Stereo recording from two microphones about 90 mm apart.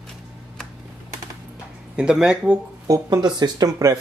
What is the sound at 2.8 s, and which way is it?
Speech, 40° right (ahead or behind).